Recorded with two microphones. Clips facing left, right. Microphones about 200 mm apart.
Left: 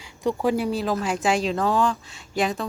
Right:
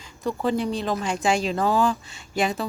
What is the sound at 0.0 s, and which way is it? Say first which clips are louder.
Speech: left 2 dB; 15° left (ahead or behind).